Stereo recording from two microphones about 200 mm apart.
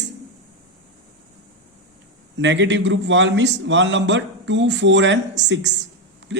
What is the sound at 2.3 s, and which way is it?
A man's voice, 65° right (ahead or behind).